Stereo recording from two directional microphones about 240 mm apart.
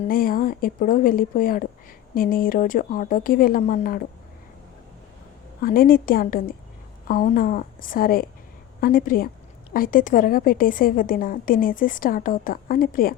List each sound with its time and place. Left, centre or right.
0.0 s a woman's voice: left
5.6 s a woman's voice: left